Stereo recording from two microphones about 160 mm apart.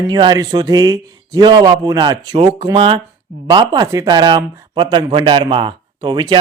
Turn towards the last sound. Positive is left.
turn(degrees=-25)  # may be behind; listen again after turning